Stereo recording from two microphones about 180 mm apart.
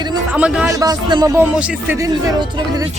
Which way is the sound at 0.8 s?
20° right (ahead or behind).